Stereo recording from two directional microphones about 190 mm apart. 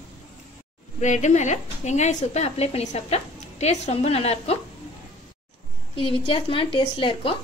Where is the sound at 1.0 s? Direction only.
40° left (ahead or behind).